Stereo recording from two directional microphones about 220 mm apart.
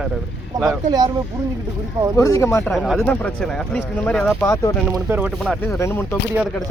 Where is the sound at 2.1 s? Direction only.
15° left (ahead or behind).